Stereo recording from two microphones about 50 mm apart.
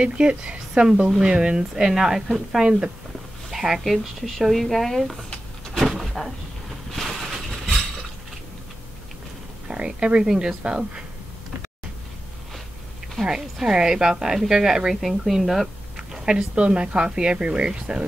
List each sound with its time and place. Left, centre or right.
0.0 s speech: right
1.9 s a woman's voice: centre
5.8 s a sound: centre
9.7 s speech: centre
13.2 s a woman's voice: centre
16.3 s speech: centre